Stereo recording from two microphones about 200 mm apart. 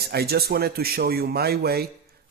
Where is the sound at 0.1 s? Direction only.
50° right (ahead or behind).